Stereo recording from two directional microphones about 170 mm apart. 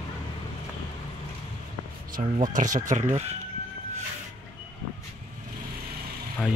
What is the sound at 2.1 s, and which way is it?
Speech, 50° right (ahead or behind).